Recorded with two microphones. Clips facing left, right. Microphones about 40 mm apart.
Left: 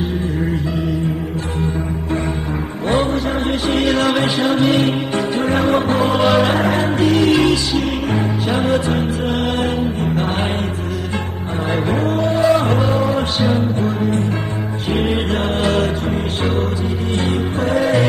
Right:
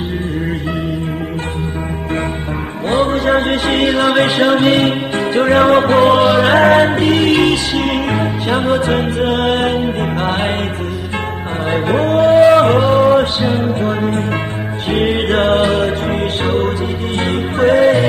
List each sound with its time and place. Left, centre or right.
2.9 s music: right
3.3 s music: right
11.7 s cattle: right
13.5 s music: right
15.6 s music: centre
16.1 s music: right